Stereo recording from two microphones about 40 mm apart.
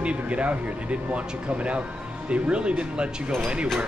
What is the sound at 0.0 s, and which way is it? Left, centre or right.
Speech, right.